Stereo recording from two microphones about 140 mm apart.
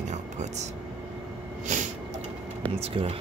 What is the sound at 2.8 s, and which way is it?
Speech, 50° right (ahead or behind).